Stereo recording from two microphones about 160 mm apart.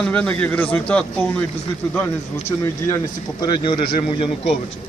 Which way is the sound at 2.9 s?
25° left (ahead or behind).